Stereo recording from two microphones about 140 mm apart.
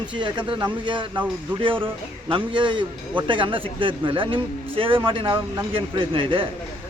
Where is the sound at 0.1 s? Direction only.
35° right (ahead or behind).